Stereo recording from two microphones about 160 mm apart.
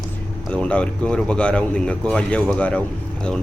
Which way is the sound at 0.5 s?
5° left (ahead or behind).